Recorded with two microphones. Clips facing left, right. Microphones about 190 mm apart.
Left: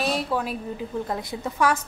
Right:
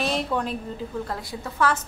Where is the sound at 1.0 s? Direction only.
20° left (ahead or behind).